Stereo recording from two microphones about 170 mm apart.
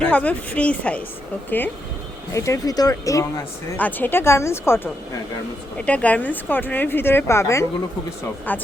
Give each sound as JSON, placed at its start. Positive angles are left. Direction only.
{"t": 0.0, "sound": "speech", "side_deg": 10}